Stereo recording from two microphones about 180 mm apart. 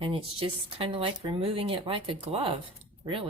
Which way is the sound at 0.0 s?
30° right (ahead or behind).